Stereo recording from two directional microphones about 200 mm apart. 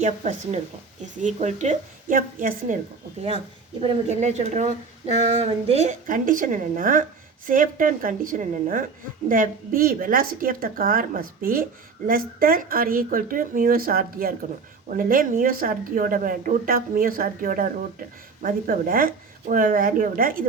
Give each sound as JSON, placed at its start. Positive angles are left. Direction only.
{"t": 0.0, "sound": "speech", "side_deg": -35}
{"t": 3.8, "sound": "a woman's voice", "side_deg": -35}